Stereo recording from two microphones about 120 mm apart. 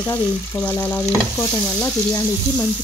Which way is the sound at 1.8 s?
25° left (ahead or behind).